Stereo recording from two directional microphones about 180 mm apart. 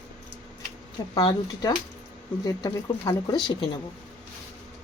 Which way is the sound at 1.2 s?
25° left (ahead or behind).